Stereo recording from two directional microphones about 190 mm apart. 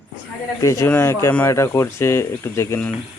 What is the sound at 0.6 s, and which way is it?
Speech, 15° left (ahead or behind).